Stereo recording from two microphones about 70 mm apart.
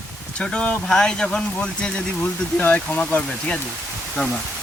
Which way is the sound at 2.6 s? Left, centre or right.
Left.